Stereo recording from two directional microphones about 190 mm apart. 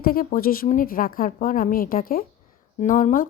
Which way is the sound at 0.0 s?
50° left (ahead or behind).